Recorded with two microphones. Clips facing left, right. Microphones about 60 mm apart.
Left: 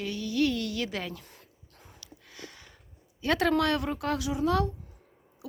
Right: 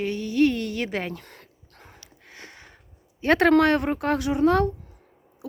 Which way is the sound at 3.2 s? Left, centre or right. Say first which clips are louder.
Right 8 dB; right.